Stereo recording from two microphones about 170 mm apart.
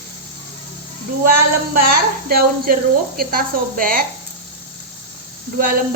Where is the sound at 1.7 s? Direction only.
60° right (ahead or behind).